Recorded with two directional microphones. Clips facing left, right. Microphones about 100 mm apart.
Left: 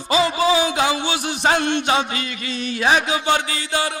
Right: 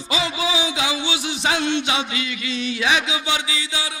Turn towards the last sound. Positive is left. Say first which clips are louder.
# left 5 dB
turn(degrees=55)  # may be behind; listen again after turning